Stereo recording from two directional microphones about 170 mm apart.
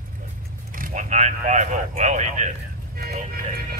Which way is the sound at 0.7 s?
45° right (ahead or behind).